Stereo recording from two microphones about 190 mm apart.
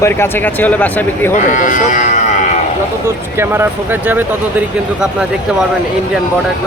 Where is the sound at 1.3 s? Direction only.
40° left (ahead or behind).